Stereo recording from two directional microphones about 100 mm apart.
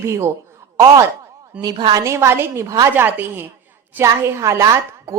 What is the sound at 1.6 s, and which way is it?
Speech, 45° right (ahead or behind).